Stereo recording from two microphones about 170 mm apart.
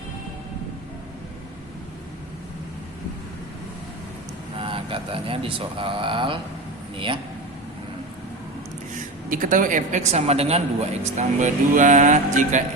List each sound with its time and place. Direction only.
4.5 s a man's voice: 30° right (ahead or behind)
9.3 s speech: 50° right (ahead or behind)